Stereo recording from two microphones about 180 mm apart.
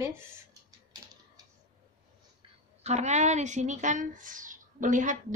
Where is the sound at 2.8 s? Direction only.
40° right (ahead or behind).